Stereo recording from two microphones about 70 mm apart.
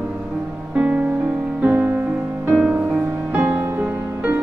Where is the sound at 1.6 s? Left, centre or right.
Right.